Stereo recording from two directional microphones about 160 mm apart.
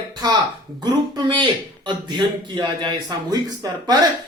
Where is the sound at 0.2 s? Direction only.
25° right (ahead or behind).